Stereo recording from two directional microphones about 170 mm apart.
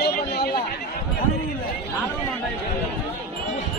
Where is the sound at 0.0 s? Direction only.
65° left (ahead or behind).